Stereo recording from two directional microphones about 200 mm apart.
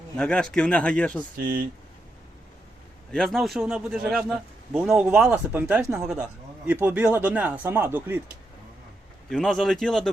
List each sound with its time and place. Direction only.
0.2 s speech: 5° left (ahead or behind)
1.4 s speech: 45° right (ahead or behind)
3.1 s speech: centre (ahead or behind)
9.3 s speech: centre (ahead or behind)